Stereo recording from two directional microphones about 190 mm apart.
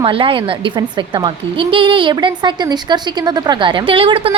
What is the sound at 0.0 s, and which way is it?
A woman's voice, 30° right (ahead or behind).